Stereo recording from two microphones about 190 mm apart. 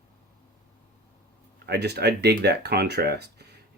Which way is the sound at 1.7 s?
60° right (ahead or behind).